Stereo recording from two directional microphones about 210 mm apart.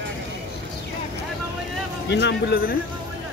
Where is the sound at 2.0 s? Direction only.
55° left (ahead or behind).